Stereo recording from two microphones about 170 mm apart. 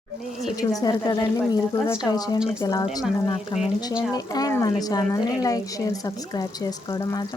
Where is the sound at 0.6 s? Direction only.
20° left (ahead or behind).